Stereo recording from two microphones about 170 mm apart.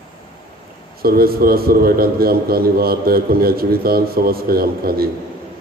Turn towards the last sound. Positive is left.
turn(degrees=-60)  # may be behind; listen again after turning